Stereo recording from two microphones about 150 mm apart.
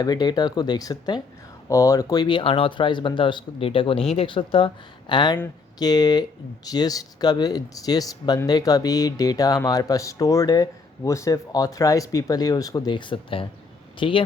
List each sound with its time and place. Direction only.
0.0 s speech: 25° left (ahead or behind)